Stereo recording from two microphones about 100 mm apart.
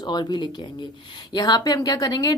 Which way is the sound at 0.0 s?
45° left (ahead or behind).